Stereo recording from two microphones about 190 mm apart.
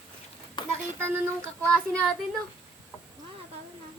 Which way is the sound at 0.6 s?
25° left (ahead or behind).